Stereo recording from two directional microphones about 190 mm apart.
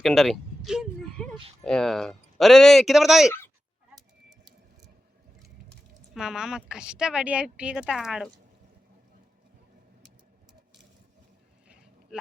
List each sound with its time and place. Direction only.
0.0 s speech: centre (ahead or behind)
3.9 s a sound: centre (ahead or behind)
6.1 s speech: 5° right (ahead or behind)